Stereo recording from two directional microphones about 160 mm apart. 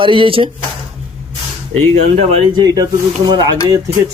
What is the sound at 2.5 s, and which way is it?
Speech, 25° right (ahead or behind).